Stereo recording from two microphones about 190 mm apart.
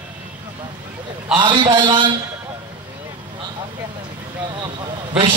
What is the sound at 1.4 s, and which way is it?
Speech, 25° right (ahead or behind).